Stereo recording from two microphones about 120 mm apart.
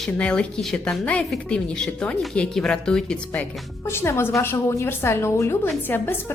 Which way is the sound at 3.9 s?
20° left (ahead or behind).